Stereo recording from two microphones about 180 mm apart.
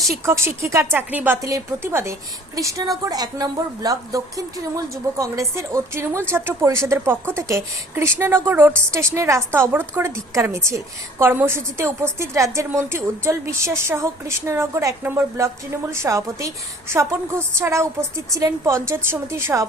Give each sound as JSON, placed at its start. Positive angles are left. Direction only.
{"t": 0.3, "sound": "a woman's voice", "side_deg": -15}